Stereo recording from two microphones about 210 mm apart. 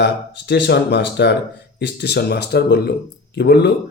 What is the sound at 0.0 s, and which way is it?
Speech, 55° left (ahead or behind).